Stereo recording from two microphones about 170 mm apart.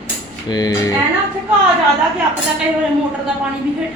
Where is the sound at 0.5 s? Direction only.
20° left (ahead or behind).